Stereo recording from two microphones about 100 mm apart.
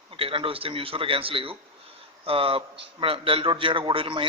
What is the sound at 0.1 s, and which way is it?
A man's voice, 65° right (ahead or behind).